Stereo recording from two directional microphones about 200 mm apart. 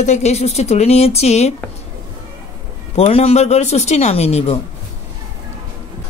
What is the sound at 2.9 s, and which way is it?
Speech, 30° left (ahead or behind).